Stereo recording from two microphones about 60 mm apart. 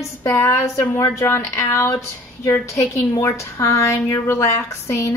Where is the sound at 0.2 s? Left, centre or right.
Left.